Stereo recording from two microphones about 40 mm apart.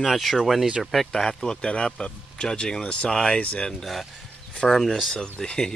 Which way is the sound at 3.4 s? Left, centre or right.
Left.